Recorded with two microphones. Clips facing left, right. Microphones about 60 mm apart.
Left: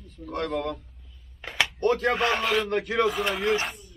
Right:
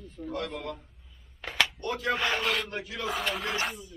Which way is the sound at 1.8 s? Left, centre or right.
Left.